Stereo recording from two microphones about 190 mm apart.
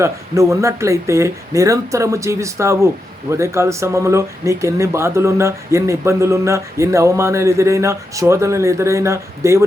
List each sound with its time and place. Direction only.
0.0 s speech: 15° right (ahead or behind)